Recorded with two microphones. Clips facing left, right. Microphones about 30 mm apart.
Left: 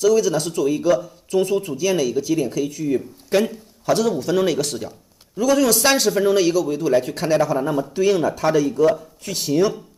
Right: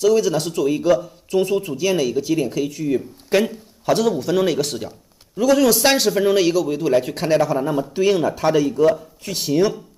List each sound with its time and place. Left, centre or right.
0.0 s speech: right
1.4 s a man's voice: centre
7.9 s a man's voice: centre
8.9 s a man's voice: centre